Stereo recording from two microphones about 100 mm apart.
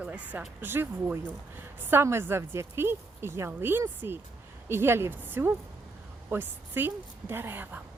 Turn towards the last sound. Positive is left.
turn(degrees=-20)  # may be behind; listen again after turning